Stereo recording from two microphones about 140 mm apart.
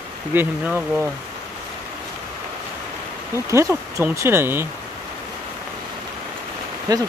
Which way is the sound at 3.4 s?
20° right (ahead or behind).